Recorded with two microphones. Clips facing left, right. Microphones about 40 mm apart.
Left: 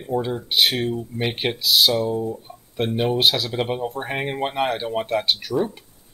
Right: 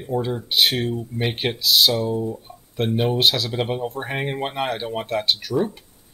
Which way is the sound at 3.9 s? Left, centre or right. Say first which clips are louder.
Even; left.